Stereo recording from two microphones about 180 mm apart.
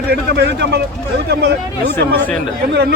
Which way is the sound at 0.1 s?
65° right (ahead or behind).